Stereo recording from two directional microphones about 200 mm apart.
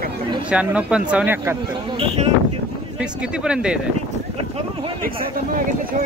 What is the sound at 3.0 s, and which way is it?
Speech, 5° right (ahead or behind).